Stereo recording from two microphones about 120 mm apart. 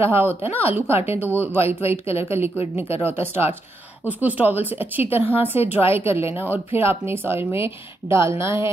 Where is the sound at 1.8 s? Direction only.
60° left (ahead or behind).